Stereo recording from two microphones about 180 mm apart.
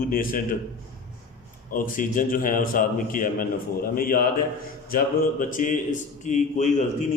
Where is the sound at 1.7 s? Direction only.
50° left (ahead or behind).